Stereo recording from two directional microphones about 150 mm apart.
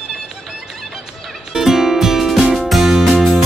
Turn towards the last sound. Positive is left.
turn(degrees=0)  # may be behind; listen again after turning